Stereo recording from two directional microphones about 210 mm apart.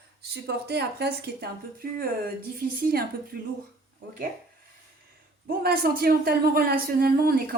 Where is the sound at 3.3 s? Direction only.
45° right (ahead or behind).